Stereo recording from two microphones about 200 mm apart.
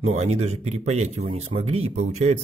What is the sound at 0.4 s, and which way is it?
Speech, 30° right (ahead or behind).